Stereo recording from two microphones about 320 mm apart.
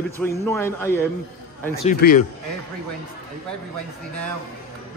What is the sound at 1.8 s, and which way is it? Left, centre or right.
Speech, left.